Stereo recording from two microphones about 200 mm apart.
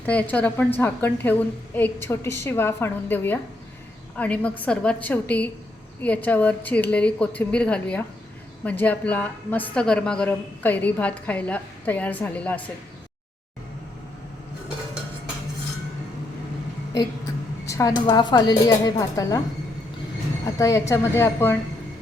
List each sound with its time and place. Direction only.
0.0 s a woman's voice: 5° left (ahead or behind)
17.7 s a sound: 15° left (ahead or behind)
18.0 s speech: 20° left (ahead or behind)
20.6 s a woman's voice: 15° left (ahead or behind)